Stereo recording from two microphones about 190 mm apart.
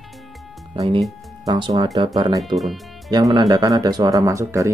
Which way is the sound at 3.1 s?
20° right (ahead or behind).